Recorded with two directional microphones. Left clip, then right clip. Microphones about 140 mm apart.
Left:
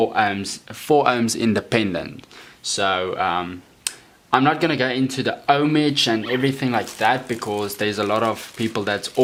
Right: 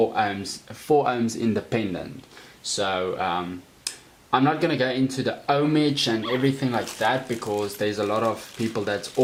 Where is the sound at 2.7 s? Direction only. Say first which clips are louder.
Left 4 dB; 20° left (ahead or behind).